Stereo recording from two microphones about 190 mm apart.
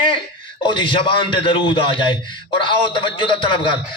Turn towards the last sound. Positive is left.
turn(degrees=30)  # may be behind; listen again after turning